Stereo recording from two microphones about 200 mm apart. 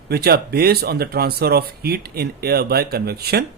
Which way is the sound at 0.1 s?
50° right (ahead or behind).